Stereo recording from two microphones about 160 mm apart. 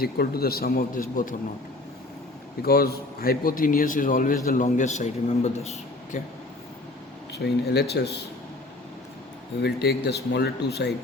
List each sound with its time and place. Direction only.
0.0 s a man's voice: 75° left (ahead or behind); by 1.4 s 60° left (ahead or behind)
2.6 s a man's voice: 75° left (ahead or behind); by 6.1 s 45° left (ahead or behind)
7.3 s speech: 90° left
9.6 s speech: 85° left